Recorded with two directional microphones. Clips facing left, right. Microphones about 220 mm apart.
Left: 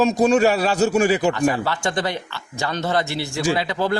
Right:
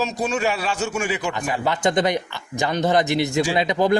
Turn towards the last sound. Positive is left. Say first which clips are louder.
# right 2 dB
turn(degrees=-15)  # may be behind; listen again after turning